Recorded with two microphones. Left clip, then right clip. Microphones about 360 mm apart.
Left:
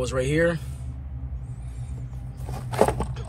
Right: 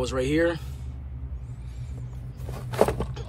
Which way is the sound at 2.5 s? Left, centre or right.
Centre.